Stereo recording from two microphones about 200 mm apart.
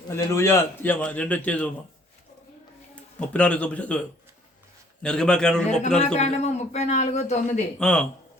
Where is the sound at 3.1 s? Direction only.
5° left (ahead or behind).